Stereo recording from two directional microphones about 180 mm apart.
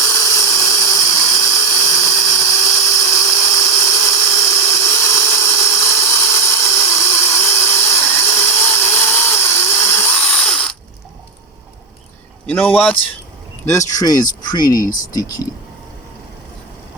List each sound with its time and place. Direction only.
0.0 s a sound: 15° left (ahead or behind)
12.5 s a man's voice: 5° left (ahead or behind)
14.8 s speech: 50° left (ahead or behind)
15.1 s speech: 20° left (ahead or behind)